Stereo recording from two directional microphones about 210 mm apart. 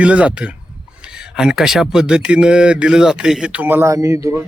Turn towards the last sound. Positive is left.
turn(degrees=-15)  # may be behind; listen again after turning